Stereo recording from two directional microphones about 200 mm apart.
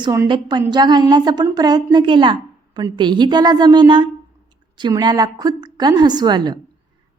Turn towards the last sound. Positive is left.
turn(degrees=-20)  # may be behind; listen again after turning